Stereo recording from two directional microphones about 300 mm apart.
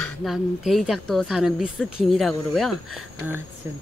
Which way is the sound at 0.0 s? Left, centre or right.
Centre.